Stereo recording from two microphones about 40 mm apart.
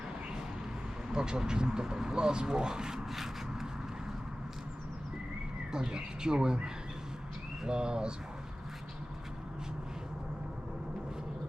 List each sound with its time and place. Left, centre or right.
1.1 s speech: centre
5.7 s speech: right